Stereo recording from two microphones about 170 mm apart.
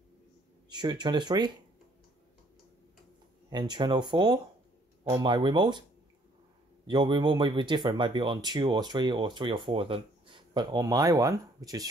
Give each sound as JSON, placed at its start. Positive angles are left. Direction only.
{"t": 0.7, "sound": "speech", "side_deg": -25}
{"t": 3.4, "sound": "speech", "side_deg": -25}
{"t": 6.9, "sound": "speech", "side_deg": -30}